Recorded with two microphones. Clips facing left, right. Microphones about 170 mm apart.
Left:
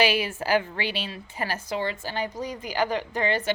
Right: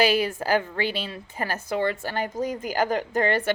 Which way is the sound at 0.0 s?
40° right (ahead or behind).